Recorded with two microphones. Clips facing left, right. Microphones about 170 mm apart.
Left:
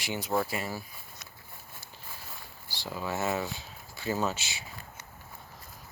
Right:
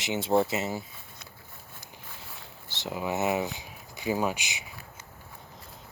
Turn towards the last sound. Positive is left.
turn(degrees=-15)  # may be behind; listen again after turning